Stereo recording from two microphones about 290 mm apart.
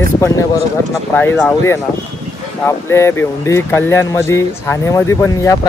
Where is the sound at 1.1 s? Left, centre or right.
Centre.